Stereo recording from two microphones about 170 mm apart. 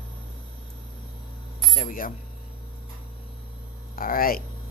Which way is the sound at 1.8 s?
55° left (ahead or behind).